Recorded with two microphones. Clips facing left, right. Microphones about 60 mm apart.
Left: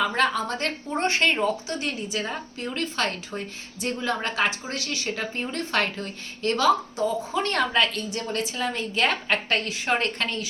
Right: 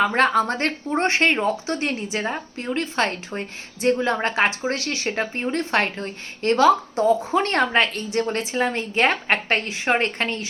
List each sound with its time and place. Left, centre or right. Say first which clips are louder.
0.0 s a woman's voice: right 5 dB; right